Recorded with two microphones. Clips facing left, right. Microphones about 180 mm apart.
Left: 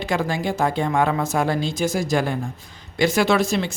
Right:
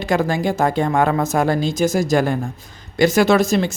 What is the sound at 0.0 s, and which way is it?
Speech, 45° right (ahead or behind).